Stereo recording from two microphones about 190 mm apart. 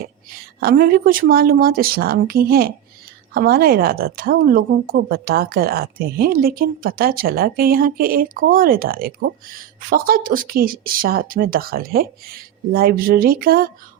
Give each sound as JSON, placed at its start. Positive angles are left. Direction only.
{"t": 0.6, "sound": "a woman's voice", "side_deg": -50}